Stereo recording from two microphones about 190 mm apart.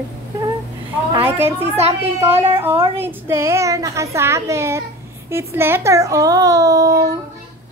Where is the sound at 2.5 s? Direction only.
15° right (ahead or behind).